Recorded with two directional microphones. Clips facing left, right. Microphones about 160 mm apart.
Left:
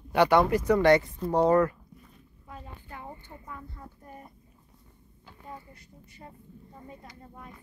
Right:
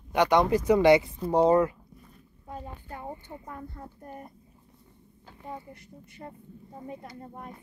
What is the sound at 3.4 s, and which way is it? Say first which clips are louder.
Speech: right 1 dB; 45° right (ahead or behind).